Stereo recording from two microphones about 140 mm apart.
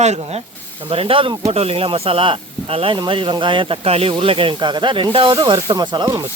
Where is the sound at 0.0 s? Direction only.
50° right (ahead or behind); by 6.2 s 30° right (ahead or behind).